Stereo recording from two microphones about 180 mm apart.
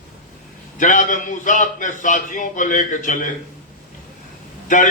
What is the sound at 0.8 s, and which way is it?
A man's voice, 45° left (ahead or behind).